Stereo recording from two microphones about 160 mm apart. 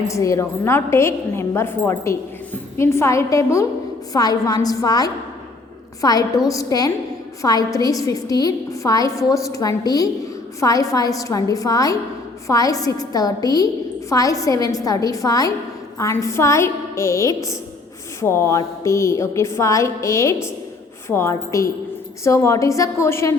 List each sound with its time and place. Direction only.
0.1 s a woman's voice: 20° left (ahead or behind)